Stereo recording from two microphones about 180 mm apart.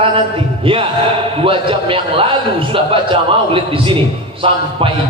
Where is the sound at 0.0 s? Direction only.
30° right (ahead or behind).